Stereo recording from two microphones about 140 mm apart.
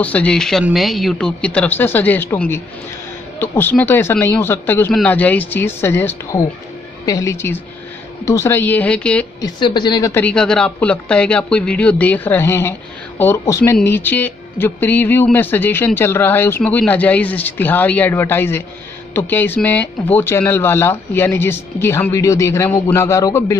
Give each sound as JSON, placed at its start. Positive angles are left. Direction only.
{"t": 0.0, "sound": "speech", "side_deg": 10}
{"t": 9.4, "sound": "a woman's voice", "side_deg": 30}
{"t": 10.1, "sound": "speech", "side_deg": 10}